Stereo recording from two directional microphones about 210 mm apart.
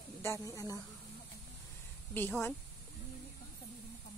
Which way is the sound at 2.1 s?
10° left (ahead or behind).